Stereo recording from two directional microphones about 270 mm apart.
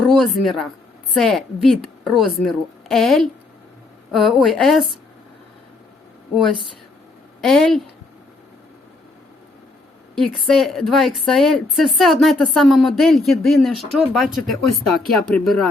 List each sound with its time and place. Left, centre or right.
0.0 s a woman's voice: centre
7.4 s a woman's voice: centre
10.2 s a woman's voice: centre